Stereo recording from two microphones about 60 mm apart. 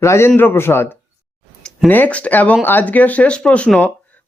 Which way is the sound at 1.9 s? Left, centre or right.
Left.